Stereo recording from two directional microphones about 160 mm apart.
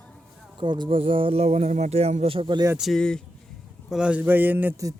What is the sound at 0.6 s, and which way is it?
Speech, 30° right (ahead or behind).